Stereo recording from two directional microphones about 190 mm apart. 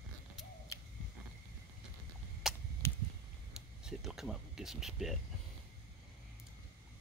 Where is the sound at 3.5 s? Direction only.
5° right (ahead or behind).